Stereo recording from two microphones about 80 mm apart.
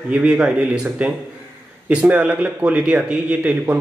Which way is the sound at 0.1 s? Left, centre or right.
Centre.